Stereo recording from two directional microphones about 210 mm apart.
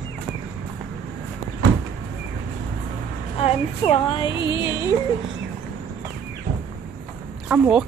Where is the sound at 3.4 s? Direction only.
30° left (ahead or behind).